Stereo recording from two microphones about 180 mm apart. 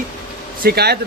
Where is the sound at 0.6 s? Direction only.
65° right (ahead or behind).